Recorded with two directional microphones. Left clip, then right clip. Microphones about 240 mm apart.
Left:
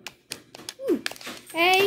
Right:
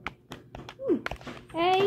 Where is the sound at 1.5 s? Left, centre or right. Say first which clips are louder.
Left 4 dB; left.